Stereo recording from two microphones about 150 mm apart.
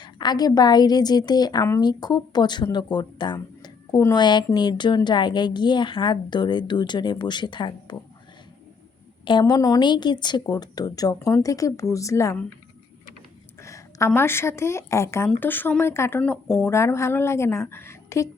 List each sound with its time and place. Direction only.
0.0 s a woman's voice: 30° left (ahead or behind)
9.2 s a woman's voice: 30° left (ahead or behind)
13.6 s a woman's voice: 20° left (ahead or behind)